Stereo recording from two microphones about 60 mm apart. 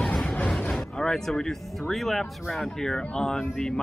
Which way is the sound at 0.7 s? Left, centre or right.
Centre.